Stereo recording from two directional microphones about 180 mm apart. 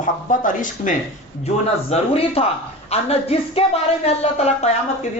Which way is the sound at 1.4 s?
35° left (ahead or behind).